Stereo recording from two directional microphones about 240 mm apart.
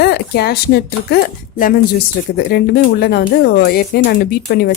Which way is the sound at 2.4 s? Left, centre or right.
Left.